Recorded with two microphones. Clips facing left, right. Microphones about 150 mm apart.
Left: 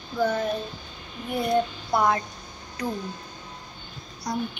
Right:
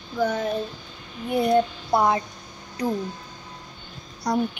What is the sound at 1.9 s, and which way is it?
Speech, 25° right (ahead or behind).